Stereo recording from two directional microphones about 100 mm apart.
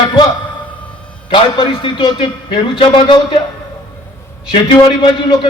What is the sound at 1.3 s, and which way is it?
A man's voice, 55° left (ahead or behind).